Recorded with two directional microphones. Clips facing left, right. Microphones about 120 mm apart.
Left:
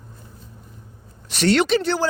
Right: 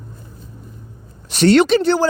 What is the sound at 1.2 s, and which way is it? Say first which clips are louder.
Speech: right 6 dB; 30° right (ahead or behind).